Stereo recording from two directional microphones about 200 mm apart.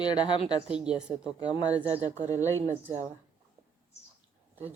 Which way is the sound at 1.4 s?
20° left (ahead or behind).